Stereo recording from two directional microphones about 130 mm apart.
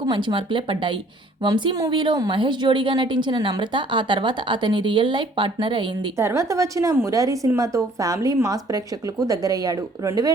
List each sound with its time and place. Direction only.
0.0 s a woman's voice: 35° right (ahead or behind)
6.1 s a woman's voice: 20° right (ahead or behind)